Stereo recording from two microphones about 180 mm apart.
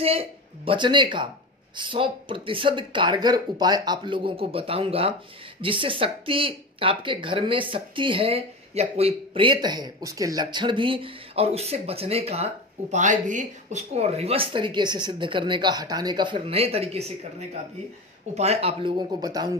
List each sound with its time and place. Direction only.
0.0 s speech: 30° right (ahead or behind)
12.9 s speech: 45° right (ahead or behind); by 19.5 s 20° right (ahead or behind)